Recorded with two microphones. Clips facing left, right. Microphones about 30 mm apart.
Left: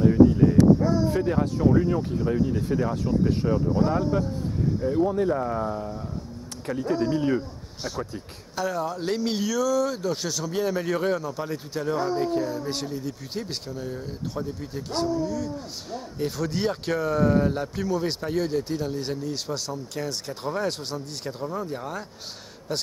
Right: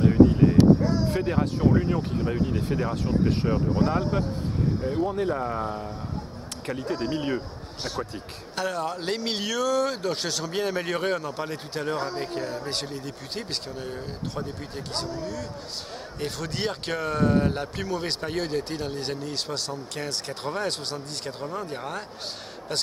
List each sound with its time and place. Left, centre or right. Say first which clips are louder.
0.0 s speech: left 1 dB; right
1.8 s speech: left 2 dB; right
4.8 s speech: left 5 dB; right
5.7 s speech: left 2 dB; right